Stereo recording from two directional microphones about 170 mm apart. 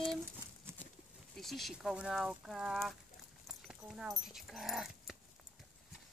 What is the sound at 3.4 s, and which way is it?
Dog, centre (ahead or behind).